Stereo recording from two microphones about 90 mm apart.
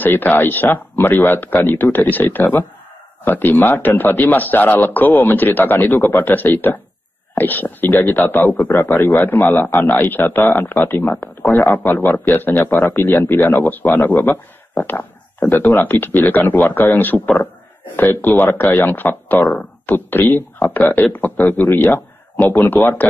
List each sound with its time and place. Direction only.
0.0 s speech: 20° left (ahead or behind)